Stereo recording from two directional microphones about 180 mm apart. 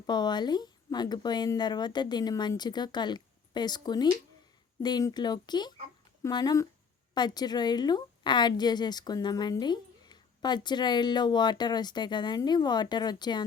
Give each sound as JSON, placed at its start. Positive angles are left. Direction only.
{"t": 0.0, "sound": "a woman's voice", "side_deg": 25}